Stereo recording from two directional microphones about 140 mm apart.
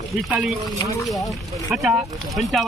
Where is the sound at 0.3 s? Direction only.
5° right (ahead or behind).